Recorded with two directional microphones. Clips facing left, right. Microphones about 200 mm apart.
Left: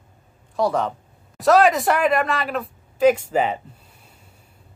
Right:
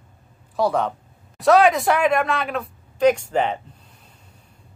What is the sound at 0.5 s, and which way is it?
Speech, centre (ahead or behind).